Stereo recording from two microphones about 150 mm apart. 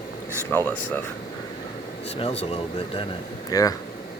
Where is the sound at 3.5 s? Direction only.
25° left (ahead or behind).